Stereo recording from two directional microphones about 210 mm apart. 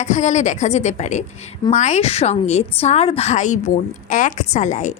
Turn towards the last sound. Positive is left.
turn(degrees=35)  # may be behind; listen again after turning